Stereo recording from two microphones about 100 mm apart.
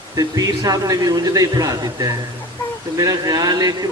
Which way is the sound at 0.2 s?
35° right (ahead or behind).